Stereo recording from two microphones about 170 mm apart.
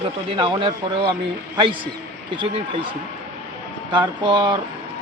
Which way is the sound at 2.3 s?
30° right (ahead or behind).